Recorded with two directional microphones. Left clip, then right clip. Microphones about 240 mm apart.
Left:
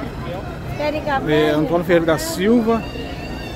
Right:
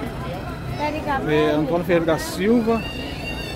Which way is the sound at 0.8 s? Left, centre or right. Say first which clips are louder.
Left 3 dB; left.